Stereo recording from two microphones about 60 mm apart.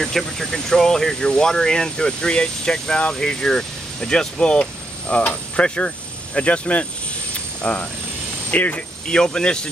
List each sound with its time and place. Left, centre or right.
0.0 s speech: centre; by 8.8 s left
9.0 s speech: centre